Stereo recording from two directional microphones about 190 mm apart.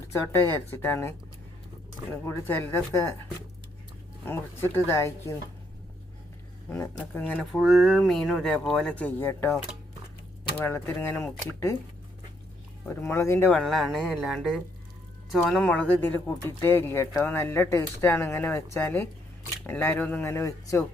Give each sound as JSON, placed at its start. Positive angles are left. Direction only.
{"t": 0.1, "sound": "speech", "side_deg": 15}
{"t": 2.2, "sound": "speech", "side_deg": 10}
{"t": 4.3, "sound": "speech", "side_deg": 10}
{"t": 6.7, "sound": "speech", "side_deg": 10}
{"t": 7.3, "sound": "speech", "side_deg": 0}
{"t": 10.6, "sound": "speech", "side_deg": 10}
{"t": 12.9, "sound": "speech", "side_deg": 15}